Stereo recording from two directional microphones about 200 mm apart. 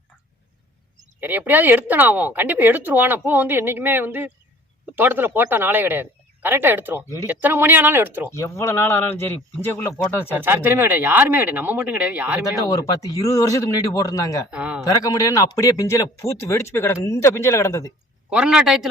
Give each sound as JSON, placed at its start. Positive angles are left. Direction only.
{"t": 1.2, "sound": "speech", "side_deg": -10}
{"t": 8.3, "sound": "speech", "side_deg": 15}
{"t": 10.3, "sound": "speech", "side_deg": -10}
{"t": 12.6, "sound": "speech", "side_deg": 20}
{"t": 14.5, "sound": "speech", "side_deg": -5}
{"t": 14.9, "sound": "speech", "side_deg": 15}
{"t": 18.3, "sound": "speech", "side_deg": -5}